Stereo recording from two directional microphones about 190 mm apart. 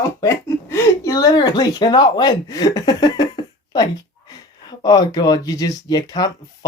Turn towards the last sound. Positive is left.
turn(degrees=20)  # may be behind; listen again after turning